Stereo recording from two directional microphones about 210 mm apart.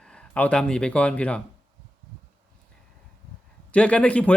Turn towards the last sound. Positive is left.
turn(degrees=5)  # may be behind; listen again after turning